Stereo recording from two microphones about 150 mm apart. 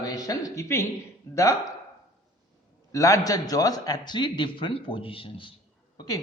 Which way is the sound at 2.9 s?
20° left (ahead or behind).